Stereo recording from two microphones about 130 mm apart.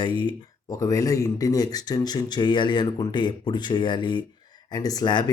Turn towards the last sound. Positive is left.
turn(degrees=35)  # may be behind; listen again after turning